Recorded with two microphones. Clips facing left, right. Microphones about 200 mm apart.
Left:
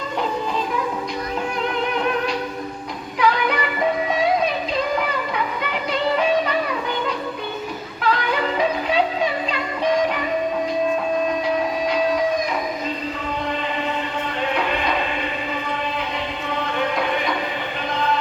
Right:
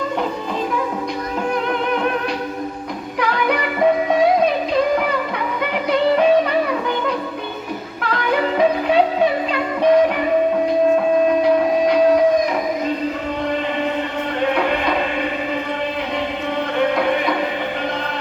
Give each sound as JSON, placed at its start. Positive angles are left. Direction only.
{"t": 3.2, "sound": "music", "side_deg": -55}
{"t": 8.0, "sound": "music", "side_deg": -55}
{"t": 11.4, "sound": "music", "side_deg": -55}
{"t": 14.5, "sound": "music", "side_deg": -55}
{"t": 16.7, "sound": "music", "side_deg": -60}